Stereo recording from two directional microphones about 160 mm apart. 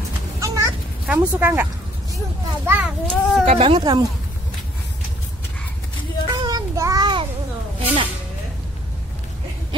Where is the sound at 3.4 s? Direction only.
40° right (ahead or behind).